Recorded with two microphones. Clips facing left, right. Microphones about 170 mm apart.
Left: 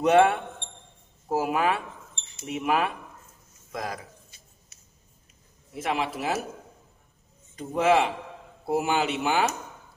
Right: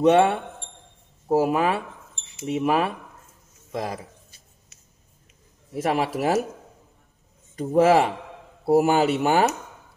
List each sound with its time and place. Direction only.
0.0 s a man's voice: 30° right (ahead or behind)
5.8 s speech: 40° right (ahead or behind)
7.5 s speech: 40° right (ahead or behind)